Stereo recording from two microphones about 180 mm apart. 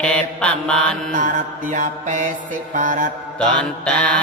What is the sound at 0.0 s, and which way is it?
Mantra, 5° left (ahead or behind).